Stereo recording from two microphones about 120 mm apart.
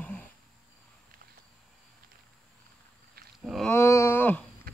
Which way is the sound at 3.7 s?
25° left (ahead or behind).